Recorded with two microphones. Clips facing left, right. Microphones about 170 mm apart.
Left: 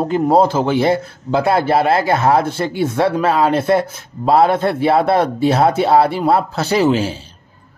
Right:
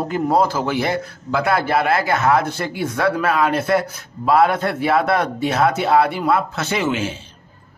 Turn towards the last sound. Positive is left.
turn(degrees=35)  # may be behind; listen again after turning